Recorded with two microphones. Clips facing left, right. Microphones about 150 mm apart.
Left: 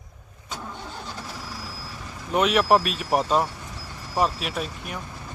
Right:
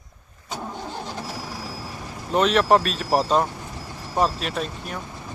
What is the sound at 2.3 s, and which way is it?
Speech, 10° left (ahead or behind).